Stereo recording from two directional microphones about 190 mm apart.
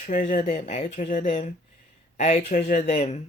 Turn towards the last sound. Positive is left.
turn(degrees=35)  # may be behind; listen again after turning